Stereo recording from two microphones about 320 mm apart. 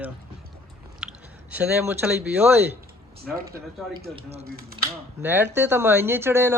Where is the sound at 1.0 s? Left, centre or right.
Centre.